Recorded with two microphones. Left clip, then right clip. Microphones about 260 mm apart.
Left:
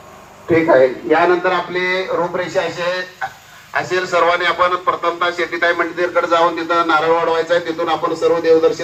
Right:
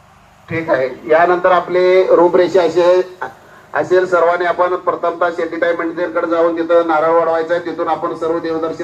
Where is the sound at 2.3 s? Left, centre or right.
Right.